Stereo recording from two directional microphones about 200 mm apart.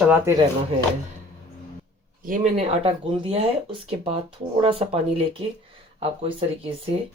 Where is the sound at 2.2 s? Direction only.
40° right (ahead or behind).